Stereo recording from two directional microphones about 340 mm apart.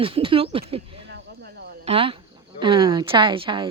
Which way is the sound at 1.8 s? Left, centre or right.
Centre.